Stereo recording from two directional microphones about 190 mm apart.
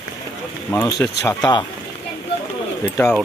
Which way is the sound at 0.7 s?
15° left (ahead or behind).